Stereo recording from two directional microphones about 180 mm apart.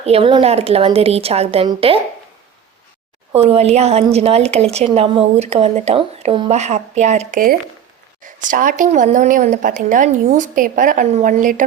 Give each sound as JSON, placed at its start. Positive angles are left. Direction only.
{"t": 0.0, "sound": "a woman's voice", "side_deg": -30}
{"t": 3.3, "sound": "a woman's voice", "side_deg": -35}